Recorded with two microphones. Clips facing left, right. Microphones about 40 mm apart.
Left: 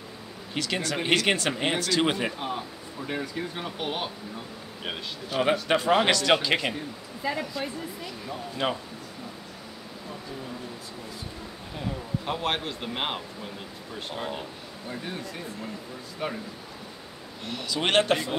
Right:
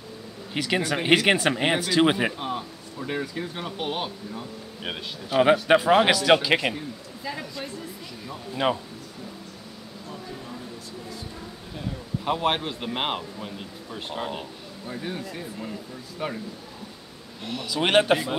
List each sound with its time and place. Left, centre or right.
0.6 s speech: centre
5.4 s speech: centre
7.3 s speech: centre
8.6 s speech: centre
12.3 s speech: centre
17.5 s speech: centre